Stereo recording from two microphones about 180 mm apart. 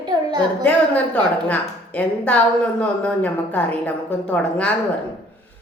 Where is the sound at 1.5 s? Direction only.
5° left (ahead or behind).